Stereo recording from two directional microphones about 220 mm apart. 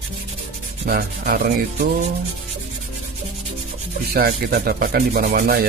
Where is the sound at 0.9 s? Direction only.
45° right (ahead or behind).